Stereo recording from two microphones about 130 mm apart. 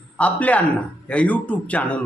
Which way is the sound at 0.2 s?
10° left (ahead or behind).